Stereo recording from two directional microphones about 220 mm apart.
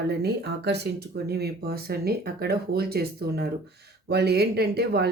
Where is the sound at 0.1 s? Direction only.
50° right (ahead or behind).